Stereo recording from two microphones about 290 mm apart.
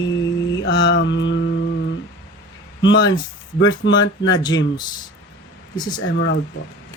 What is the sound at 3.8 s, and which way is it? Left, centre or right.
Speech, left.